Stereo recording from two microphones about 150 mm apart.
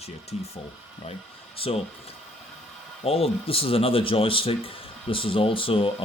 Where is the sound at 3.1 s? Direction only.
40° left (ahead or behind).